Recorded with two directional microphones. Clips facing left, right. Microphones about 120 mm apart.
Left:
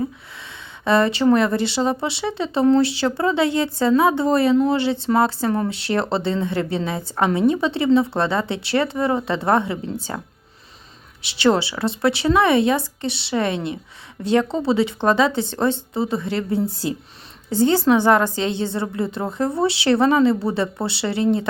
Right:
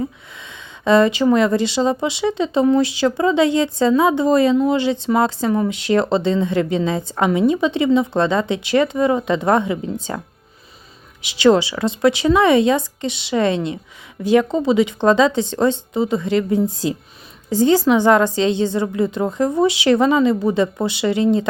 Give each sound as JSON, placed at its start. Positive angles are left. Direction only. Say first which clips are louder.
{"t": 0.3, "sound": "a sound", "louder": "right 1 dB", "side_deg": -20}
{"t": 1.3, "sound": "speech", "louder": "right 2 dB", "side_deg": -20}
{"t": 11.2, "sound": "speech", "louder": "right 4 dB", "side_deg": -15}